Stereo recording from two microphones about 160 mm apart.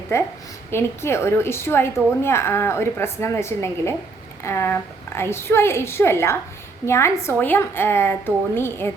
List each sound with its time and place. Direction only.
0.1 s a woman's voice: 15° left (ahead or behind)